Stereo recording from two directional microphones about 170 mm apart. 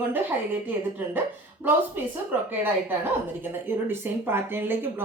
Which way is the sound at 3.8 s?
15° right (ahead or behind).